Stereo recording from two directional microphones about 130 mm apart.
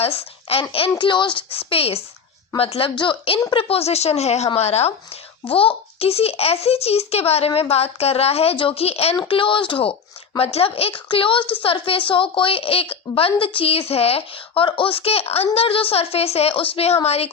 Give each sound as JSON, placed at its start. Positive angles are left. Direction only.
{"t": 0.0, "sound": "a woman's voice", "side_deg": 50}
{"t": 9.1, "sound": "a woman's voice", "side_deg": 40}